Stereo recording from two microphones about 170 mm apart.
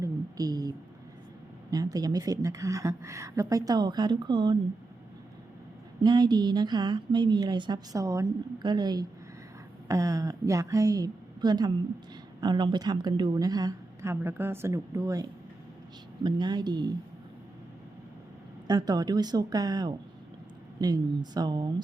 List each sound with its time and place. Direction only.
0.0 s a sound: 20° right (ahead or behind)
1.7 s a woman's voice: 20° right (ahead or behind)
6.0 s a woman's voice: 25° right (ahead or behind)
18.7 s a woman's voice: 20° right (ahead or behind)